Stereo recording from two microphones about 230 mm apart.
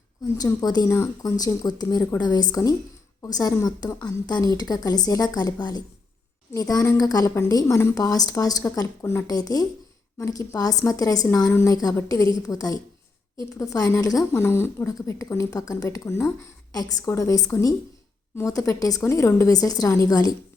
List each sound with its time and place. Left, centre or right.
0.3 s speech: centre